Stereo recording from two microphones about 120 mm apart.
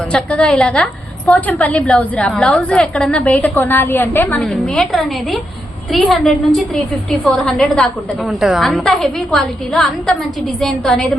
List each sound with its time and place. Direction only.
0.1 s a woman's voice: 10° left (ahead or behind)